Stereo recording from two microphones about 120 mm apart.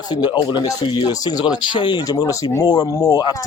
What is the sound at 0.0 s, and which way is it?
Speech, 35° left (ahead or behind).